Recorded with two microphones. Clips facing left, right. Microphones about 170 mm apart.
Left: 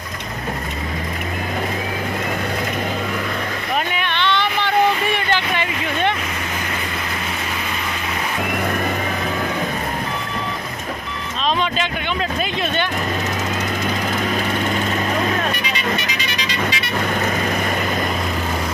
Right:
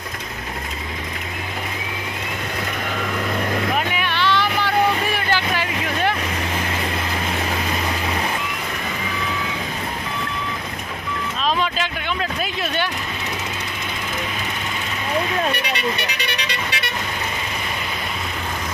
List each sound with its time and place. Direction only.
4.0 s vehicle: 5° right (ahead or behind)
15.5 s vehicle: 65° right (ahead or behind)